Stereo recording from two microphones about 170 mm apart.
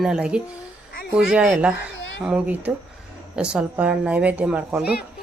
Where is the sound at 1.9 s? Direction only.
90° left.